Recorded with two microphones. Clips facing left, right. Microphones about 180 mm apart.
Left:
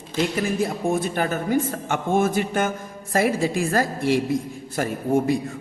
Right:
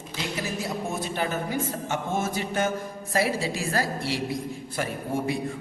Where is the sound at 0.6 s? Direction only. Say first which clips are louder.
Left 7 dB; 50° left (ahead or behind).